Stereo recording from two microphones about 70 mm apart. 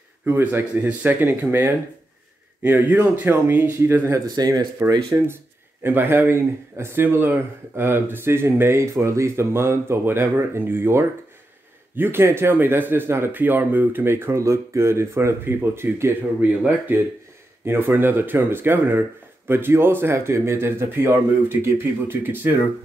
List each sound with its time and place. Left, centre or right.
0.2 s speech: right
4.4 s speech: right
5.3 s speech: right
16.3 s speech: right